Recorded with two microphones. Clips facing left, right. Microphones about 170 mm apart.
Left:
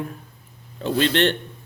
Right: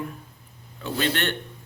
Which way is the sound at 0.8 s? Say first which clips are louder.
Left 7 dB; 30° left (ahead or behind).